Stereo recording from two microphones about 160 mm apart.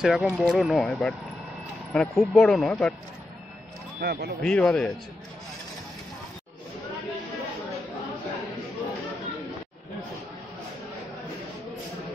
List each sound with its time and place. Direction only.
0.0 s speech: 5° right (ahead or behind)
4.0 s speech: 85° right
4.4 s speech: 5° left (ahead or behind)